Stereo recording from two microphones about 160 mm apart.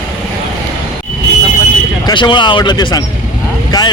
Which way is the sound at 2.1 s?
30° left (ahead or behind).